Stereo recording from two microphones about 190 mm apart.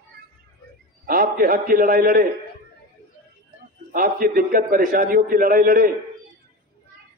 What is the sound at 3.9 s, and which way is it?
A man's voice, 50° right (ahead or behind).